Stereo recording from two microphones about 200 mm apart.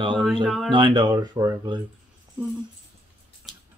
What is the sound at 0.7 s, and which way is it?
Speech, 25° right (ahead or behind).